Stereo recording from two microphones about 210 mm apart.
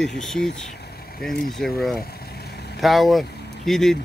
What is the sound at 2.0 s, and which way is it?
Vehicle, 50° left (ahead or behind).